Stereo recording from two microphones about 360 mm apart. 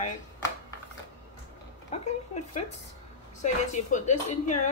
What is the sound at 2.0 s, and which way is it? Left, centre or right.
Speech, centre.